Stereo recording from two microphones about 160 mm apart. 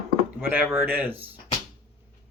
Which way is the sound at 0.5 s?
10° right (ahead or behind).